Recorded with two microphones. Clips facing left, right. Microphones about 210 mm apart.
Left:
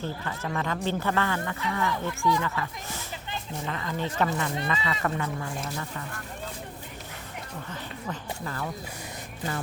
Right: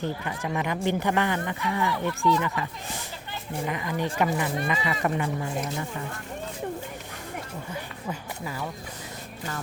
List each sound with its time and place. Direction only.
0.0 s speech: 15° right (ahead or behind)
2.0 s speech: 15° left (ahead or behind)
3.7 s speech: 15° right (ahead or behind)
7.7 s speech: 10° right (ahead or behind)